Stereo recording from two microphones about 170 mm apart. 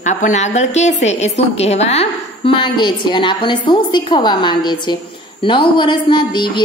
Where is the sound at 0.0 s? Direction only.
45° left (ahead or behind).